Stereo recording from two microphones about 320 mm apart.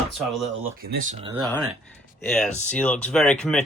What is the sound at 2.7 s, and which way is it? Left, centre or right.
Speech, centre.